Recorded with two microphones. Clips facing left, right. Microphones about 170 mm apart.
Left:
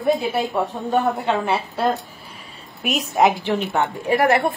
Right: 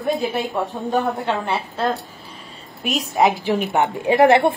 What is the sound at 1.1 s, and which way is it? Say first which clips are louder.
A woman's voice: left 2 dB; 10° left (ahead or behind).